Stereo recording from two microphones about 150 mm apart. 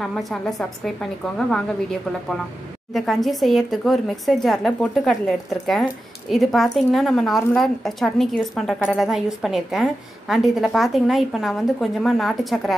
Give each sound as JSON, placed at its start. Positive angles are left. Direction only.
{"t": 0.0, "sound": "a woman's voice", "side_deg": 0}